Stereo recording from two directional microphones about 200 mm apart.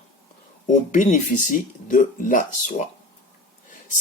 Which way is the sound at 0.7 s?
40° left (ahead or behind).